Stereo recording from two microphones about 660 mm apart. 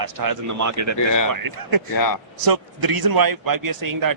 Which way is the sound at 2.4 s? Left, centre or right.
Right.